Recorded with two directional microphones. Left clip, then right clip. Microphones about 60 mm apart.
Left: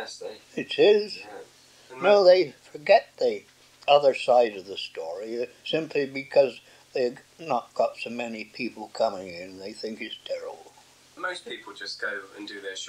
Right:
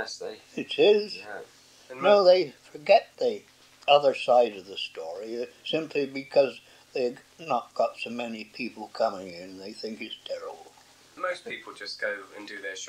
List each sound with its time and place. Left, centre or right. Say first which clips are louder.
0.6 s speech: left 1 dB; right